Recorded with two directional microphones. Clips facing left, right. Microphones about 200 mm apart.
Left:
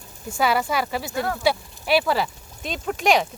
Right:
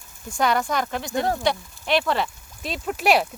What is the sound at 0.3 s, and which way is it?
Speech, 5° left (ahead or behind).